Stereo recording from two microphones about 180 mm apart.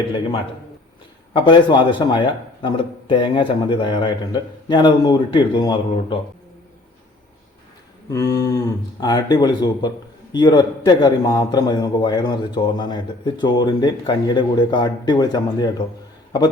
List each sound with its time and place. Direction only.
1.3 s a man's voice: 30° left (ahead or behind)
8.1 s a man's voice: 20° left (ahead or behind)